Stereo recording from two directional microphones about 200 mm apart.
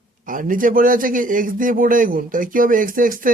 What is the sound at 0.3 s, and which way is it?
A man's voice, 40° right (ahead or behind).